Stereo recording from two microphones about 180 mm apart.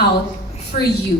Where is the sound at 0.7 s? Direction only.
45° left (ahead or behind).